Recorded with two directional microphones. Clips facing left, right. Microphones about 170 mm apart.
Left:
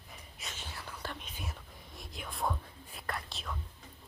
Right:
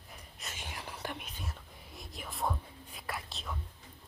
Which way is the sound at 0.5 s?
15° right (ahead or behind).